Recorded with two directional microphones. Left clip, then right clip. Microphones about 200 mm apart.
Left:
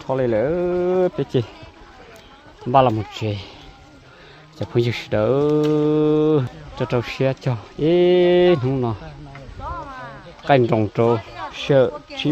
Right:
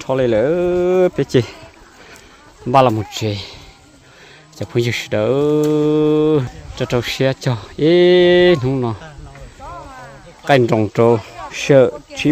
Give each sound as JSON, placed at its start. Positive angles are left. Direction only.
{"t": 0.0, "sound": "speech", "side_deg": -20}
{"t": 2.7, "sound": "speech", "side_deg": -20}
{"t": 10.4, "sound": "a man's voice", "side_deg": -15}